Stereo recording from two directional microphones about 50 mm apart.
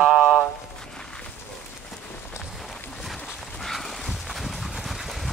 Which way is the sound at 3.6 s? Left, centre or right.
Centre.